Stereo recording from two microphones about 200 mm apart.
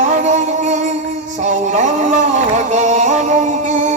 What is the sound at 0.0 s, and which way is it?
Music, 35° right (ahead or behind).